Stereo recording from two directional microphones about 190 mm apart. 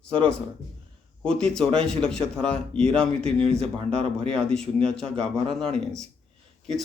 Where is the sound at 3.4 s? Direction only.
30° right (ahead or behind).